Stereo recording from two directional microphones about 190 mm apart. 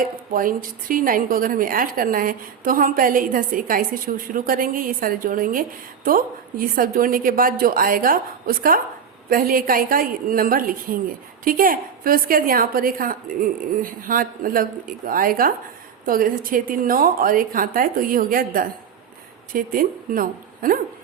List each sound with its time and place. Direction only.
0.0 s a woman's voice: 45° right (ahead or behind)